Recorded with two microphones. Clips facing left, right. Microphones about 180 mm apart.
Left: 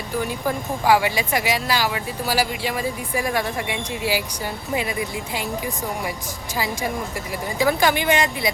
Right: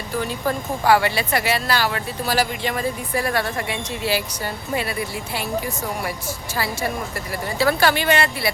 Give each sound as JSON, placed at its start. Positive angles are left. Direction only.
{"t": 0.2, "sound": "speech", "side_deg": 15}
{"t": 7.6, "sound": "speech", "side_deg": 15}